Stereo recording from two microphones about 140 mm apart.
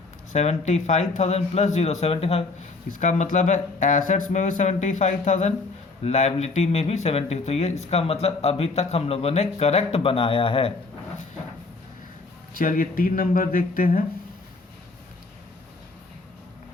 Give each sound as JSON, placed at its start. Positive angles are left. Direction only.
{"t": 0.3, "sound": "speech", "side_deg": 55}
{"t": 2.9, "sound": "speech", "side_deg": 60}
{"t": 12.5, "sound": "speech", "side_deg": 85}